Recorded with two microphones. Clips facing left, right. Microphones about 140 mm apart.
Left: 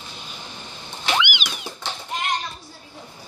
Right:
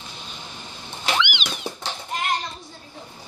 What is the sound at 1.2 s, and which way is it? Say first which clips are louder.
Cat: right 1 dB; 5° left (ahead or behind).